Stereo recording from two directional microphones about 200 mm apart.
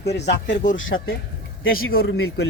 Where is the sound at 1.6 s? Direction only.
90° left.